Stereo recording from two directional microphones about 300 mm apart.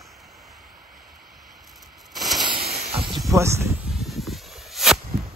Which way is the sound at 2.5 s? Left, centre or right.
Centre.